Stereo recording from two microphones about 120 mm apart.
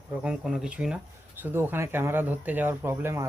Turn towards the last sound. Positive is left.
turn(degrees=-20)  # may be behind; listen again after turning